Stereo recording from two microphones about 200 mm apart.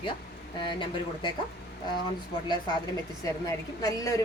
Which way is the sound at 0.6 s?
25° left (ahead or behind).